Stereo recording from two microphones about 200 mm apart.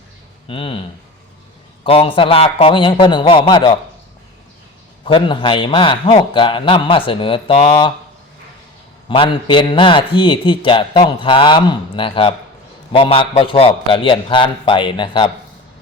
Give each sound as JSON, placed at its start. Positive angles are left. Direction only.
{"t": 0.4, "sound": "a man's voice", "side_deg": 25}
{"t": 1.8, "sound": "a man's voice", "side_deg": 25}
{"t": 5.0, "sound": "a man's voice", "side_deg": 25}
{"t": 9.0, "sound": "a man's voice", "side_deg": 25}